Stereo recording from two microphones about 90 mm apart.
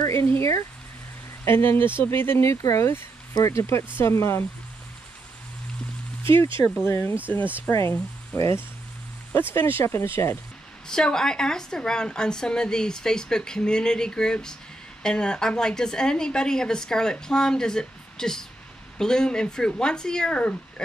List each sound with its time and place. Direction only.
0.1 s speech: 30° left (ahead or behind)
6.9 s speech: 25° left (ahead or behind)
10.9 s a woman's voice: 5° left (ahead or behind)